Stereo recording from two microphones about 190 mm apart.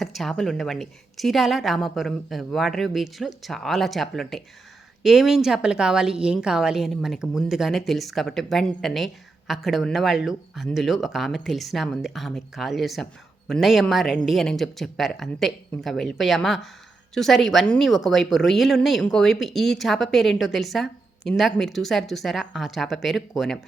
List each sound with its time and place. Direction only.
0.0 s speech: centre (ahead or behind)